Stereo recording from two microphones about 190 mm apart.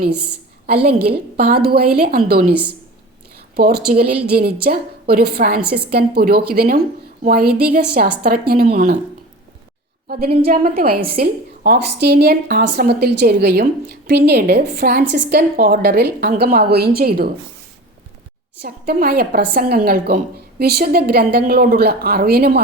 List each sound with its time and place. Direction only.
0.7 s a woman's voice: 55° right (ahead or behind)
3.5 s a woman's voice: 55° right (ahead or behind)
10.1 s a woman's voice: 55° right (ahead or behind)
18.6 s a woman's voice: 55° right (ahead or behind)